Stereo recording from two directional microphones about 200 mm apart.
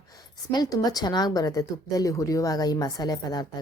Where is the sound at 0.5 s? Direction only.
20° left (ahead or behind).